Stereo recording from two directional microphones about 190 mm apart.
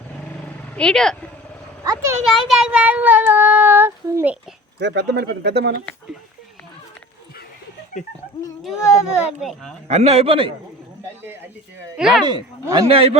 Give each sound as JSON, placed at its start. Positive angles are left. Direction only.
{"t": 0.4, "sound": "vehicle", "side_deg": 5}
{"t": 1.8, "sound": "a child's voice", "side_deg": -20}
{"t": 2.3, "sound": "child singing", "side_deg": 0}
{"t": 4.8, "sound": "speech", "side_deg": -65}
{"t": 8.6, "sound": "speech", "side_deg": -5}
{"t": 9.9, "sound": "a man's voice", "side_deg": -35}
{"t": 11.9, "sound": "speech", "side_deg": -5}
{"t": 12.2, "sound": "a man's voice", "side_deg": -25}